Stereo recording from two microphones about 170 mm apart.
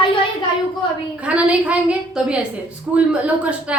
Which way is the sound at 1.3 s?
10° right (ahead or behind).